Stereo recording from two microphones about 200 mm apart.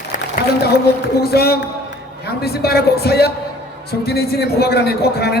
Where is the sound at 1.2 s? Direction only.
50° left (ahead or behind).